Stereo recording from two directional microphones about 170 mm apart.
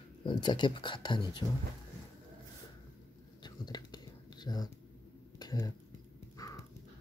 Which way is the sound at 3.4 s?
25° left (ahead or behind).